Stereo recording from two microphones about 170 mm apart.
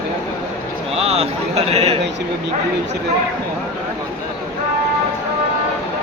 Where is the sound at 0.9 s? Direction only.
35° right (ahead or behind).